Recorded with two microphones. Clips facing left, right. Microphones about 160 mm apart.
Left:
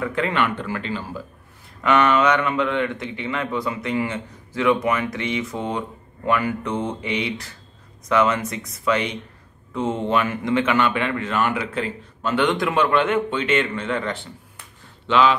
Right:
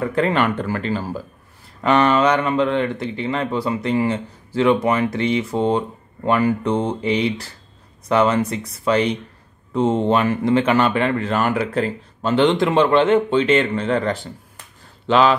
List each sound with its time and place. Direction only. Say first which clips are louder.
0.0 s speech: right 4 dB; 35° right (ahead or behind)